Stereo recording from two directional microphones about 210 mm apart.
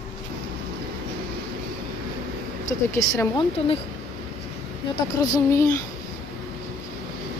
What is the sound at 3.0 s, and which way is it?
Speech, 15° left (ahead or behind).